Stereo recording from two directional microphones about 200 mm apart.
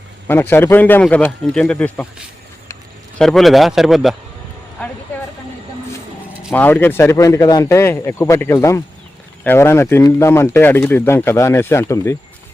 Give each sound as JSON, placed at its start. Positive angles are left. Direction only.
{"t": 0.3, "sound": "speech", "side_deg": 10}
{"t": 3.2, "sound": "a man's voice", "side_deg": 0}
{"t": 6.5, "sound": "speech", "side_deg": 10}